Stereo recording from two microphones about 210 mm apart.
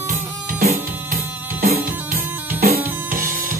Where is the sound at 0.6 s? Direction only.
40° right (ahead or behind).